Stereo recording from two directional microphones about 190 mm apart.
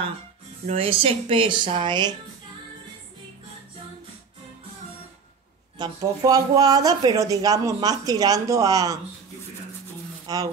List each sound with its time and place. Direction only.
0.7 s speech: 30° right (ahead or behind)
5.8 s speech: 20° right (ahead or behind)
10.2 s speech: 20° right (ahead or behind)